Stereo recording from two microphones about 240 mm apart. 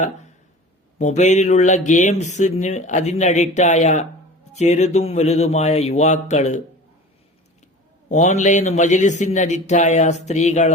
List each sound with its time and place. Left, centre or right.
0.9 s speech: left
8.1 s speech: left